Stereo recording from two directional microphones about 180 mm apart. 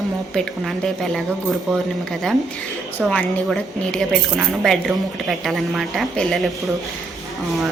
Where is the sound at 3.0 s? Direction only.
5° left (ahead or behind).